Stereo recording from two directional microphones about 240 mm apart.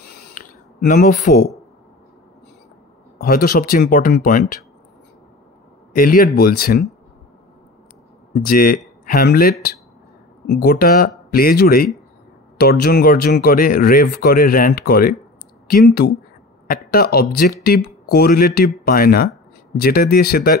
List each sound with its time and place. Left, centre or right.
0.2 s a sound: left
3.2 s speech: left
5.9 s speech: left
8.3 s speech: left